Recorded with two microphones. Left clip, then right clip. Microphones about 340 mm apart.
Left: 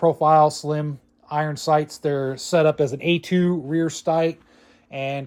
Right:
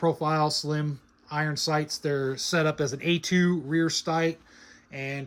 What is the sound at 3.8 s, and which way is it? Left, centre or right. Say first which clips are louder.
Speech: left 5 dB; centre.